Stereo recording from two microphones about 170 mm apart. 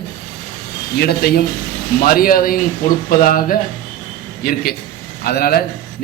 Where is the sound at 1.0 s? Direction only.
65° left (ahead or behind).